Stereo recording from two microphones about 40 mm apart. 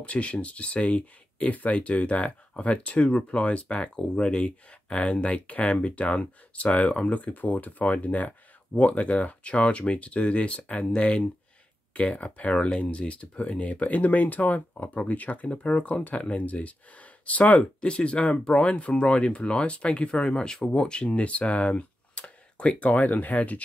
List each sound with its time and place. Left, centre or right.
0.0 s speech: left
21.1 s speech: left